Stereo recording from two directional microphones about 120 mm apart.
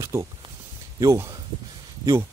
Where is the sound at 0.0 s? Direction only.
25° right (ahead or behind).